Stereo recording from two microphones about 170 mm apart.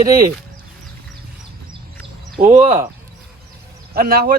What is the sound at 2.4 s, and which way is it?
Speech, 45° right (ahead or behind).